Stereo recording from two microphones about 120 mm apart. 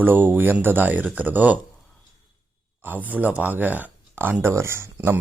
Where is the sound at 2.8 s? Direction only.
15° right (ahead or behind).